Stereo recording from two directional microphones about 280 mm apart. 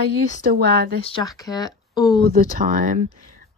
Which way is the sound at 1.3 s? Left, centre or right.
Centre.